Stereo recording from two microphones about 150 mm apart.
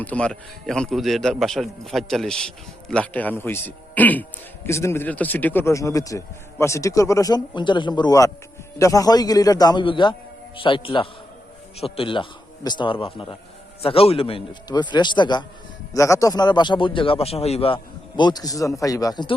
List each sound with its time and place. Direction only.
0.0 s a man's voice: 10° left (ahead or behind); by 17.7 s 40° left (ahead or behind)
18.2 s a man's voice: 30° left (ahead or behind)